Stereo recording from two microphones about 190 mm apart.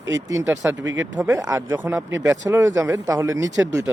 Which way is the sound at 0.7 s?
80° right.